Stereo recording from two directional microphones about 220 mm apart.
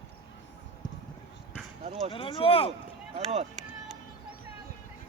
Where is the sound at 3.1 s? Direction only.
30° right (ahead or behind).